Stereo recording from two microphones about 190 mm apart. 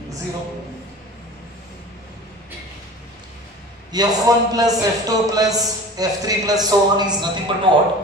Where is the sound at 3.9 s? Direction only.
20° right (ahead or behind).